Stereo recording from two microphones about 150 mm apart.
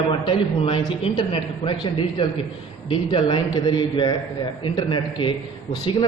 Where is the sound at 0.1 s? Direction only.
35° left (ahead or behind).